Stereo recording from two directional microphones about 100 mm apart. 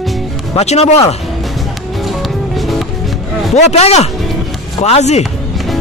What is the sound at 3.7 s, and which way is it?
Speech, 90° left.